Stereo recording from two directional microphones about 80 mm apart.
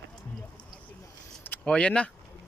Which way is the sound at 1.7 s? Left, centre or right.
Centre.